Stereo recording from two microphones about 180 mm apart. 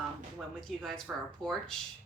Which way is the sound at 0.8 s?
5° right (ahead or behind).